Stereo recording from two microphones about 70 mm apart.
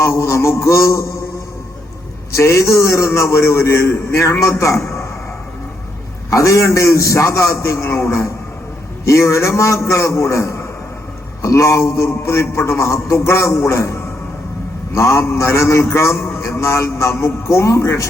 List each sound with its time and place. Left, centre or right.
0.0 s a man's voice: left
2.3 s a man's voice: left
6.3 s a man's voice: left